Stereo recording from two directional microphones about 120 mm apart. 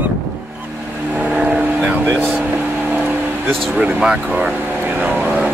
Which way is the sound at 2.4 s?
15° right (ahead or behind).